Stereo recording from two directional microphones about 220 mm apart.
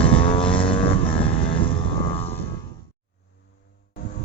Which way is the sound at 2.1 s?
25° left (ahead or behind).